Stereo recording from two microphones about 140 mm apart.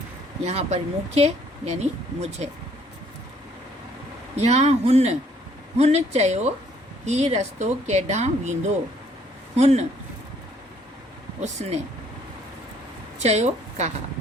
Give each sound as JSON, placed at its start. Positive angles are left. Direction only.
{"t": 0.4, "sound": "speech", "side_deg": -50}
{"t": 4.4, "sound": "speech", "side_deg": -50}
{"t": 11.6, "sound": "speech", "side_deg": -55}
{"t": 13.1, "sound": "a woman's voice", "side_deg": -55}